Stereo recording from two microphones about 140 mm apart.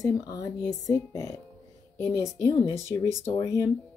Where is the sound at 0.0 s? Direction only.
25° left (ahead or behind).